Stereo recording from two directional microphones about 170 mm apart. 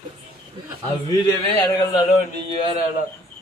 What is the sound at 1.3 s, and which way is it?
Speech, 15° left (ahead or behind).